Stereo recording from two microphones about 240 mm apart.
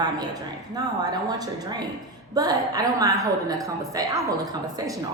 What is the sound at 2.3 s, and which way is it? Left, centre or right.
Speech, centre.